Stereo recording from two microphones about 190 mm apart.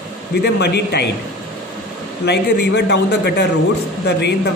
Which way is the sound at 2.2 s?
60° left (ahead or behind).